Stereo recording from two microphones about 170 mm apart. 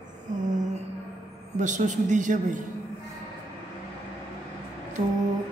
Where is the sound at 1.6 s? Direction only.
45° right (ahead or behind).